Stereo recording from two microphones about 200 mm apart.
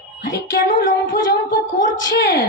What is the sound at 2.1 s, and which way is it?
Speech, 60° left (ahead or behind).